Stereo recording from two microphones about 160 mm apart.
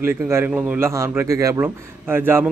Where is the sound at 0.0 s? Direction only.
15° right (ahead or behind).